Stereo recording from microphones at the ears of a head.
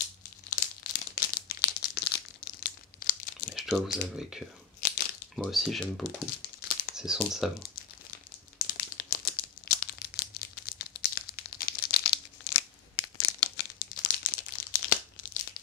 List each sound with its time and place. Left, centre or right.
0.0 s crumpling: left
3.7 s speech: centre
4.7 s crunch: left
6.2 s crumpling: left
7.0 s speech: centre
7.6 s crumpling: left